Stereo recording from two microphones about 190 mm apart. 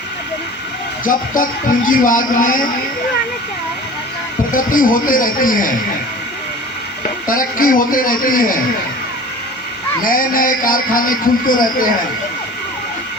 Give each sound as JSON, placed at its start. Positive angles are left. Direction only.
{"t": 1.0, "sound": "a man's voice", "side_deg": 45}
{"t": 4.5, "sound": "a man's voice", "side_deg": 45}
{"t": 7.3, "sound": "a man's voice", "side_deg": 45}
{"t": 10.0, "sound": "a man's voice", "side_deg": 45}